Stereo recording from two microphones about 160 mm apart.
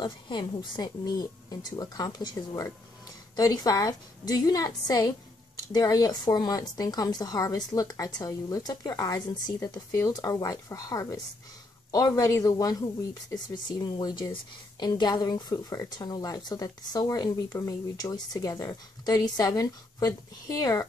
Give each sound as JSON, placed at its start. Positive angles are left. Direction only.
{"t": 0.0, "sound": "speech", "side_deg": 30}